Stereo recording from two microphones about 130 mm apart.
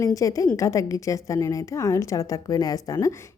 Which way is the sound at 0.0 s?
25° left (ahead or behind).